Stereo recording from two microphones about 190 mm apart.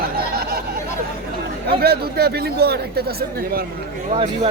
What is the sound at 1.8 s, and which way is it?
Speech, 55° right (ahead or behind).